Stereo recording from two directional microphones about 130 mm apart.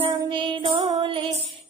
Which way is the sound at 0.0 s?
45° right (ahead or behind).